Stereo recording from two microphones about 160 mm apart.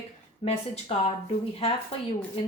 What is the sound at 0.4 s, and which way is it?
Speech, 40° left (ahead or behind).